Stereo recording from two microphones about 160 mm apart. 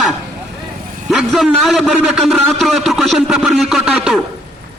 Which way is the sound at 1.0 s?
Centre (ahead or behind).